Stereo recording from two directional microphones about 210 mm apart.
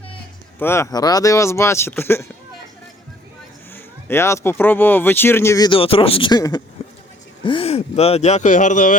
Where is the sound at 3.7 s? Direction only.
10° left (ahead or behind).